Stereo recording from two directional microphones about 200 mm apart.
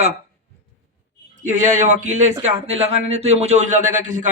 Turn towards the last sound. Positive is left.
turn(degrees=-40)  # may be behind; listen again after turning